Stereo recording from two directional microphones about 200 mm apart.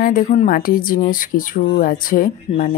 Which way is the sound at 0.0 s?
40° left (ahead or behind).